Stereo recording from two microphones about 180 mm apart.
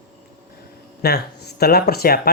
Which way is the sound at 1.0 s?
65° left (ahead or behind).